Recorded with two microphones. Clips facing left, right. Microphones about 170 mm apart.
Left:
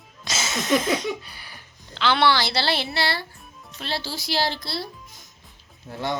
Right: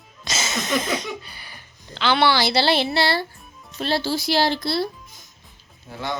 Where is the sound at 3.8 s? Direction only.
45° right (ahead or behind); by 4.9 s 60° right (ahead or behind).